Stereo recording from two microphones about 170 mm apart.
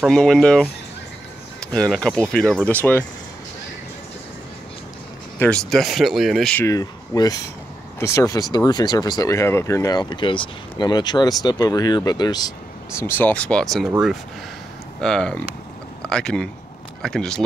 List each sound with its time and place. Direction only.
0.0 s speech: 5° left (ahead or behind)
5.4 s speech: 5° left (ahead or behind)
6.6 s speech: 20° left (ahead or behind)
13.0 s speech: 10° left (ahead or behind)
15.0 s speech: 5° left (ahead or behind)